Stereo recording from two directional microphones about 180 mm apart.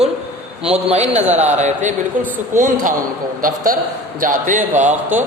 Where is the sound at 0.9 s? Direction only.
35° right (ahead or behind).